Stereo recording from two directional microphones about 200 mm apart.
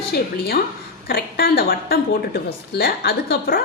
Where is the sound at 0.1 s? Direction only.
50° left (ahead or behind).